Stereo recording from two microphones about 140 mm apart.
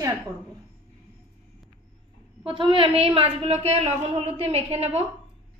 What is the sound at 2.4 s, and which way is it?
A woman's voice, 40° right (ahead or behind).